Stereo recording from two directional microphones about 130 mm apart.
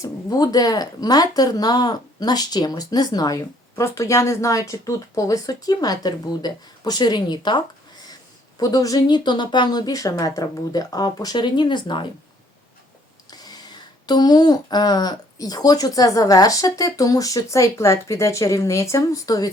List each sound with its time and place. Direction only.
0.0 s speech: 30° left (ahead or behind)
13.3 s speech: 30° left (ahead or behind)